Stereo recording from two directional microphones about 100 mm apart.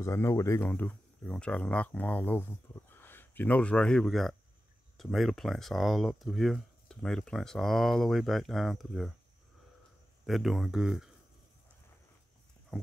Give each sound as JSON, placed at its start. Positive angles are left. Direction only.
{"t": 0.0, "sound": "speech", "side_deg": 30}
{"t": 0.6, "sound": "speech", "side_deg": 15}
{"t": 10.2, "sound": "speech", "side_deg": 0}